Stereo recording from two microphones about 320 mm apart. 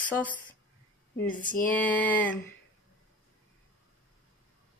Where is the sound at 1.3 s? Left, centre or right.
Left.